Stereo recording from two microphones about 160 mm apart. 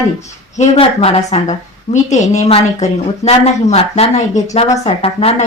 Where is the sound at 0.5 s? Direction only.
45° left (ahead or behind).